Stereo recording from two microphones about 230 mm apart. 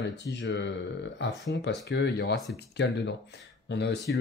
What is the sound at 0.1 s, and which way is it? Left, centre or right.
Speech, left.